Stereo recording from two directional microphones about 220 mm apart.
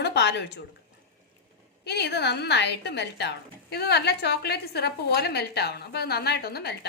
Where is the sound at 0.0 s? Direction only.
50° left (ahead or behind).